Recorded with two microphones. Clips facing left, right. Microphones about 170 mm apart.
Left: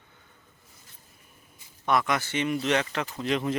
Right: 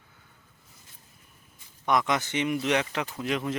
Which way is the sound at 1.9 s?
20° right (ahead or behind).